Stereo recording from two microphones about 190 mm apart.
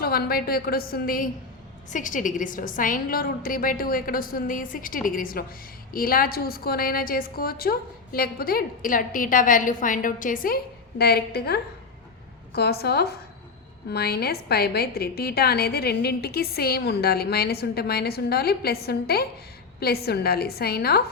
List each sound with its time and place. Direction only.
0.0 s a woman's voice: 55° left (ahead or behind)